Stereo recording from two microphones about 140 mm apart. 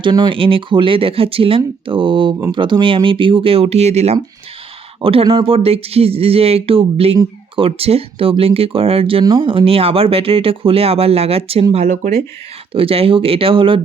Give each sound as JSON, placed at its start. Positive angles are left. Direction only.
{"t": 0.0, "sound": "speech", "side_deg": -35}
{"t": 5.0, "sound": "speech", "side_deg": -40}